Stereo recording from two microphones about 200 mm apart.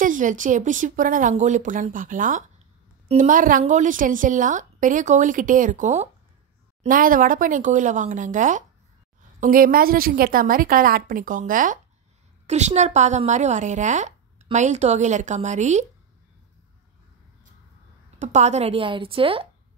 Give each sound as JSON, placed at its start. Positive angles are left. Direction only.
{"t": 0.0, "sound": "a woman's voice", "side_deg": -40}
{"t": 18.2, "sound": "speech", "side_deg": -35}